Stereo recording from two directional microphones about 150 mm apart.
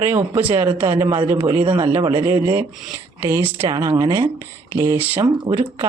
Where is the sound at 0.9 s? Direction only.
30° right (ahead or behind).